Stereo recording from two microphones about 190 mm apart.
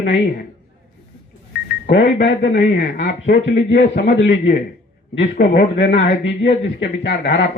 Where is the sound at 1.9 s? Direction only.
65° left (ahead or behind).